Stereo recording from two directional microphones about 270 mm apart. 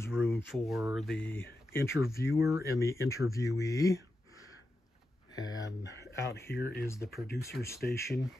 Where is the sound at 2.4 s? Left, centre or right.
Centre.